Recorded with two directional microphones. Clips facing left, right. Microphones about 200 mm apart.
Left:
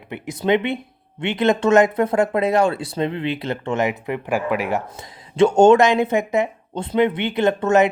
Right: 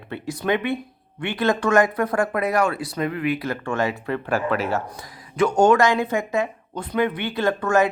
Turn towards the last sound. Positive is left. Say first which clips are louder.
# left 3 dB
turn(degrees=20)  # may be behind; listen again after turning